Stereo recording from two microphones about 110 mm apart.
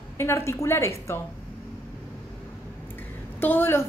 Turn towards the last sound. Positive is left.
turn(degrees=20)  # may be behind; listen again after turning